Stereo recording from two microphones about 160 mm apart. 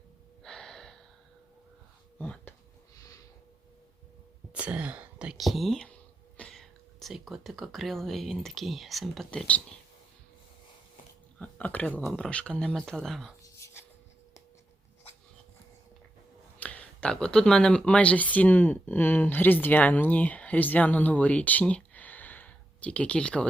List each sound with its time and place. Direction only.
0.4 s gasp: 5° left (ahead or behind)
2.1 s a sound: 10° left (ahead or behind)
4.5 s speech: 10° right (ahead or behind)
11.3 s speech: 10° left (ahead or behind)
13.4 s a sound: 15° left (ahead or behind)
16.6 s speech: 10° left (ahead or behind)